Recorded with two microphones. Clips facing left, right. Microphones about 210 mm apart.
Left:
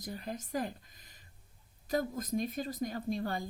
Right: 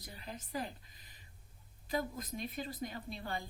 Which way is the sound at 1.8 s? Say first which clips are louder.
Left 4 dB; 45° left (ahead or behind).